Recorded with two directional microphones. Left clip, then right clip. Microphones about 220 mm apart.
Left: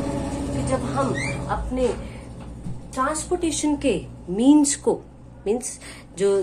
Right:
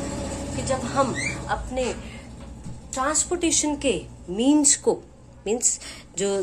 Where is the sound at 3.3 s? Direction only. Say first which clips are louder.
Left 1 dB; 45° right (ahead or behind).